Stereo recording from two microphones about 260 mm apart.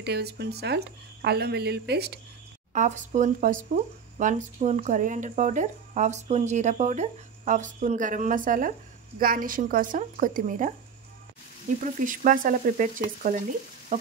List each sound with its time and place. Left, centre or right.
0.0 s speech: right
2.7 s speech: right
12.0 s speech: right